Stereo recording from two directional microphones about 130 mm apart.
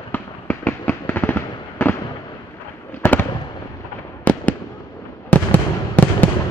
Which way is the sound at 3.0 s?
15° left (ahead or behind).